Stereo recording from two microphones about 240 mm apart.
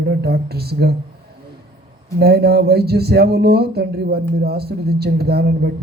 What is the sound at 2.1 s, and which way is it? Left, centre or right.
Speech, right.